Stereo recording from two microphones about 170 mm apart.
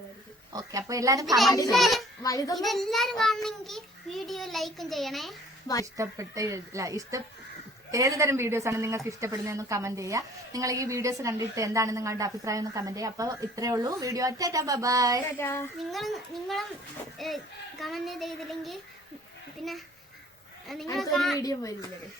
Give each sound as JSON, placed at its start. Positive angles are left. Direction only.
{"t": 0.5, "sound": "a woman's voice", "side_deg": -20}
{"t": 1.7, "sound": "a child's voice", "side_deg": 0}
{"t": 2.2, "sound": "speech", "side_deg": 20}
{"t": 2.6, "sound": "a child's voice", "side_deg": 0}
{"t": 5.8, "sound": "a woman's voice", "side_deg": -20}
{"t": 15.4, "sound": "a child's voice", "side_deg": 15}
{"t": 15.9, "sound": "a child's voice", "side_deg": 0}
{"t": 20.9, "sound": "a child's voice", "side_deg": 0}
{"t": 21.3, "sound": "speech", "side_deg": 20}